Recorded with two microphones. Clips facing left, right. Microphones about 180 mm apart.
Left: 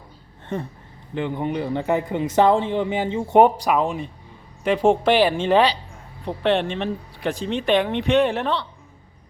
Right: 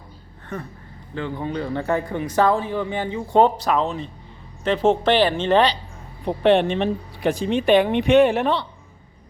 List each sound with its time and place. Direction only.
1.1 s a man's voice: 20° left (ahead or behind)
6.2 s speech: 15° right (ahead or behind)